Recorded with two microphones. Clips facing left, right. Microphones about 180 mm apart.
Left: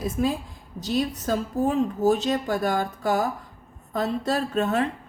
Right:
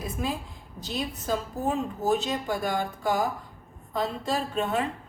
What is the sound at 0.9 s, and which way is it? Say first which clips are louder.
A woman's voice: left 5 dB; 45° left (ahead or behind).